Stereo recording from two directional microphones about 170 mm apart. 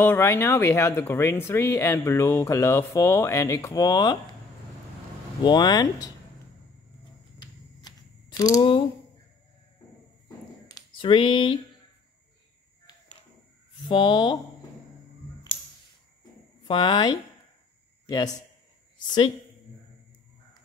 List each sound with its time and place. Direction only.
0.0 s speech: 15° left (ahead or behind)
5.4 s speech: 25° left (ahead or behind)
7.3 s a sound: 25° left (ahead or behind)
10.2 s a sound: 25° left (ahead or behind)
13.8 s speech: 30° left (ahead or behind)
16.6 s speech: 25° left (ahead or behind)